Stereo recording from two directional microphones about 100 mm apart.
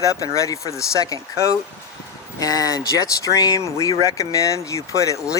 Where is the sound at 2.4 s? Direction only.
35° left (ahead or behind).